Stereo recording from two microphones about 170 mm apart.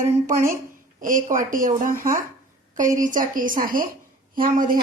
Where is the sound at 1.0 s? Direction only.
50° right (ahead or behind).